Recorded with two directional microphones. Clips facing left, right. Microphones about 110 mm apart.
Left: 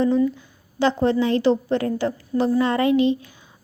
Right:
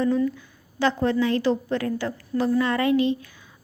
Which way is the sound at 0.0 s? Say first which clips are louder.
Left 3 dB; 25° left (ahead or behind).